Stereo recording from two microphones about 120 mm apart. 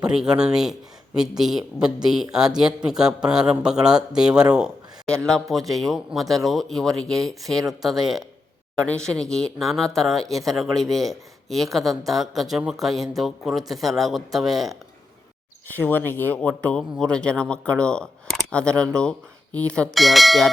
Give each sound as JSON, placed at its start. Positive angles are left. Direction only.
{"t": 0.0, "sound": "a man's voice", "side_deg": -5}
{"t": 15.6, "sound": "speech", "side_deg": 15}